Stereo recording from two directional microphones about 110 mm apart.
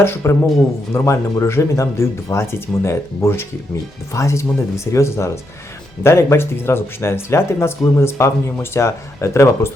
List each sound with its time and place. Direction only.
0.0 s speech: 25° left (ahead or behind)